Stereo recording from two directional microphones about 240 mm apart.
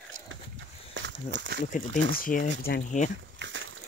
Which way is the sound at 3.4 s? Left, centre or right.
Right.